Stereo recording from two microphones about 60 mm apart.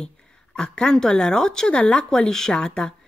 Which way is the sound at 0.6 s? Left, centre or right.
Centre.